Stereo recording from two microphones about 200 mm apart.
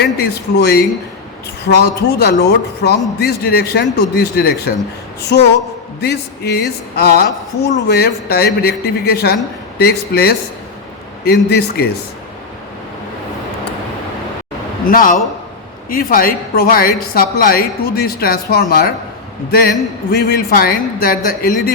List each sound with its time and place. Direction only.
0.0 s a man's voice: 55° left (ahead or behind)
14.8 s a man's voice: 45° left (ahead or behind)